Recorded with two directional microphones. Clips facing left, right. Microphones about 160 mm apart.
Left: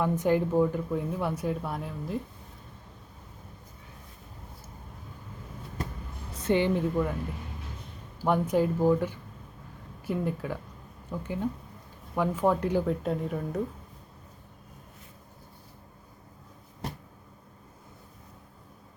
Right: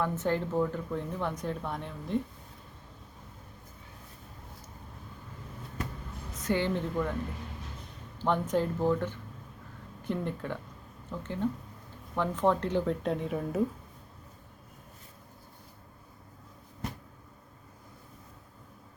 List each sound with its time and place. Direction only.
0.0 s speech: 10° left (ahead or behind)
6.3 s a sound: 30° left (ahead or behind)
6.6 s speech: 15° left (ahead or behind)
8.2 s speech: 10° left (ahead or behind)